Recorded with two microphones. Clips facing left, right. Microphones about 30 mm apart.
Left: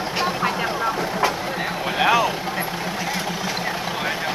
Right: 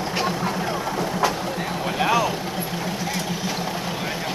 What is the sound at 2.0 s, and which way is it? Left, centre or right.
Vehicle, centre.